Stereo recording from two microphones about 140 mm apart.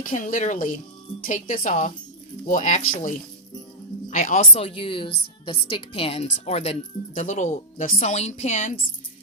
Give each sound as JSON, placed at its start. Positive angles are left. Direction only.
{"t": 0.0, "sound": "a woman's voice", "side_deg": 75}
{"t": 4.5, "sound": "a woman's voice", "side_deg": 40}
{"t": 7.9, "sound": "a woman's voice", "side_deg": 50}